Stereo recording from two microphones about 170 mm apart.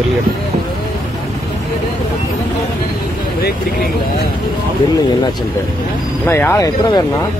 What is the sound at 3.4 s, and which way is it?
Vehicle, 65° left (ahead or behind).